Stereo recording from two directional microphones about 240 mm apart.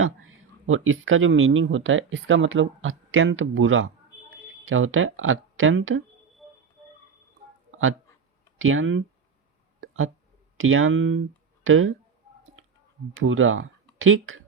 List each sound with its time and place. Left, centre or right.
0.0 s speech: right
6.4 s a sound: centre
8.5 s speech: right
9.8 s hiccup: right
10.6 s speech: right
13.1 s speech: right